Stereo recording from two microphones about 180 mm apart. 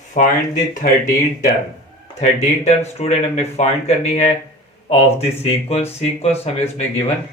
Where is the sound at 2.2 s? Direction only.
40° left (ahead or behind).